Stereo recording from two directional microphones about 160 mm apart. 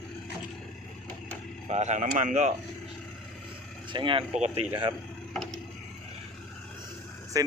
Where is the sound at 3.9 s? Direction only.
30° right (ahead or behind).